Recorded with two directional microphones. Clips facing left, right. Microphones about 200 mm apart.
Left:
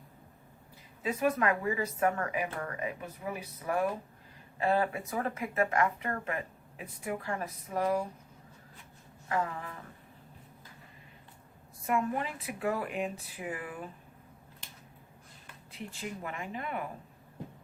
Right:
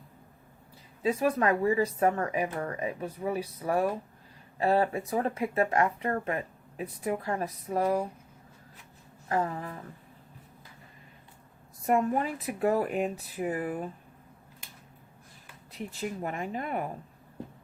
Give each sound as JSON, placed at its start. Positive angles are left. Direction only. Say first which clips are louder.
{"t": 1.0, "sound": "speech", "louder": "right 3 dB", "side_deg": -35}
{"t": 9.3, "sound": "speech", "louder": "right 3 dB", "side_deg": -35}
{"t": 11.9, "sound": "speech", "louder": "right 5 dB", "side_deg": -40}
{"t": 15.7, "sound": "speech", "louder": "right 5 dB", "side_deg": -40}